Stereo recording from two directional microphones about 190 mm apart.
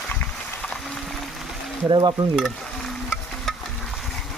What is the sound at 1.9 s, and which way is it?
Stir, 25° right (ahead or behind).